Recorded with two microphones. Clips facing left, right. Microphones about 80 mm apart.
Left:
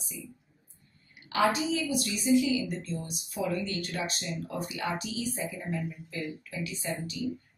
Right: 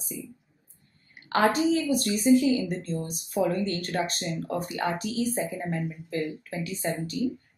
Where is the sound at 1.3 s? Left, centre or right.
Right.